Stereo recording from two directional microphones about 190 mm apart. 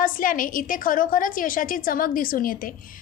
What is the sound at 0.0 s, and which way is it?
A woman's voice, 45° left (ahead or behind).